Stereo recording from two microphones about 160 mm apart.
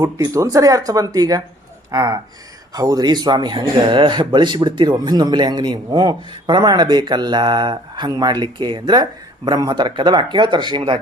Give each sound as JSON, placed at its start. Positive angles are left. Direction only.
{"t": 0.0, "sound": "speech", "side_deg": -20}